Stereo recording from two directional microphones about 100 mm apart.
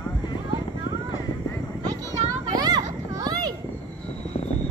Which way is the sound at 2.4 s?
40° right (ahead or behind).